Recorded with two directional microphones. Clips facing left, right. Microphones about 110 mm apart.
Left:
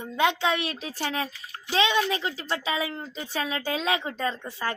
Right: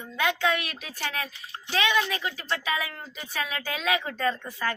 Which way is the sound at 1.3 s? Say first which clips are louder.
Even; 25° right (ahead or behind).